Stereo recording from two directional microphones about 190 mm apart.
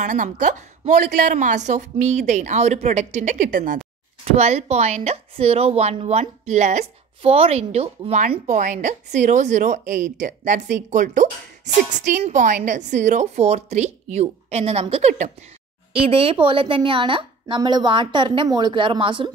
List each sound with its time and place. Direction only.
0.0 s a woman's voice: 45° right (ahead or behind)
3.5 s a sound: 45° right (ahead or behind)
4.3 s a woman's voice: 35° right (ahead or behind)